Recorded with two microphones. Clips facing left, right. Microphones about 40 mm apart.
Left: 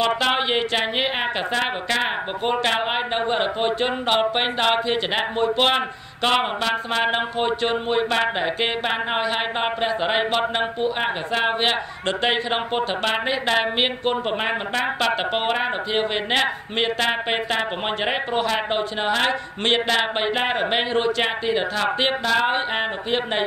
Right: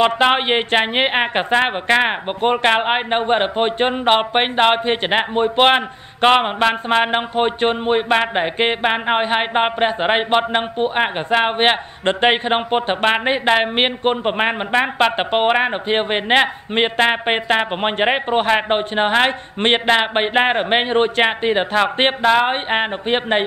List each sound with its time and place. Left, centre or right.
0.0 s speech: right